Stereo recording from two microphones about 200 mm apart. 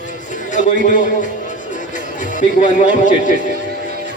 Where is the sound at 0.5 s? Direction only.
40° left (ahead or behind).